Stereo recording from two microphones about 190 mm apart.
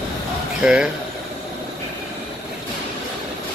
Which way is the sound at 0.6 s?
5° right (ahead or behind).